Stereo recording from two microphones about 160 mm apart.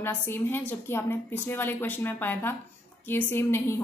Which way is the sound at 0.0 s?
15° left (ahead or behind).